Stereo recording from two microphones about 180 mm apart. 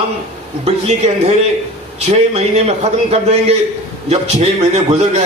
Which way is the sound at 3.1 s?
35° right (ahead or behind).